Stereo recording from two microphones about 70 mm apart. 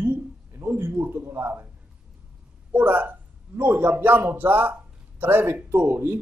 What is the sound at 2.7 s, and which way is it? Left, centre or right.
A man's voice, right.